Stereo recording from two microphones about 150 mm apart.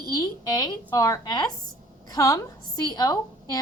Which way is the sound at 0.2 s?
25° left (ahead or behind).